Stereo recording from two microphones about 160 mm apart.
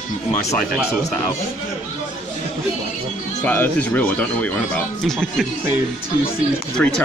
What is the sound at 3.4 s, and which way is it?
Speech, 10° left (ahead or behind).